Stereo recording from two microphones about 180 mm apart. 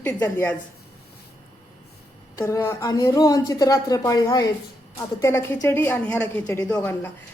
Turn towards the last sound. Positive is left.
turn(degrees=10)  # may be behind; listen again after turning